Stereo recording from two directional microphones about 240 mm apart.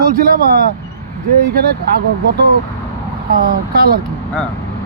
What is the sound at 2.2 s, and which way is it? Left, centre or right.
Speech, right.